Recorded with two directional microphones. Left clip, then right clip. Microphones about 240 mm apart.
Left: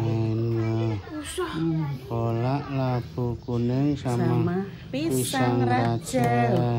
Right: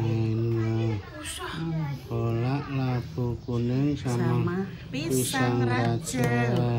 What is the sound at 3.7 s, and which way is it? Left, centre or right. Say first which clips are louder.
Speech: left 2 dB; centre.